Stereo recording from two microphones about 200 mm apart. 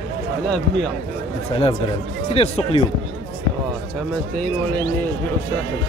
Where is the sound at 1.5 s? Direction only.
30° left (ahead or behind).